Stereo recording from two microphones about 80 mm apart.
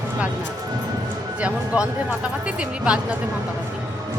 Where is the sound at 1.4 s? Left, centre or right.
Centre.